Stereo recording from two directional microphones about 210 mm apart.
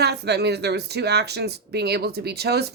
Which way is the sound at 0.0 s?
50° right (ahead or behind).